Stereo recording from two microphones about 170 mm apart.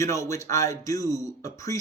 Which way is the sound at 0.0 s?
20° left (ahead or behind).